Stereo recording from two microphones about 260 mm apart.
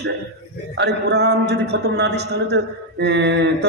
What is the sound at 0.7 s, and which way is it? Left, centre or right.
A man's voice, right.